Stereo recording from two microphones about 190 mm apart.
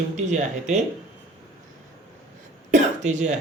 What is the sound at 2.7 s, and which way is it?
Cough, 40° right (ahead or behind).